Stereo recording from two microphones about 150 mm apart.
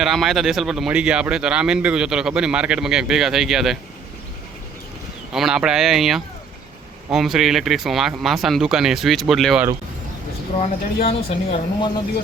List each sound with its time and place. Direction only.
0.0 s a man's voice: centre (ahead or behind)
5.3 s a man's voice: 5° right (ahead or behind)
10.6 s speech: 40° left (ahead or behind)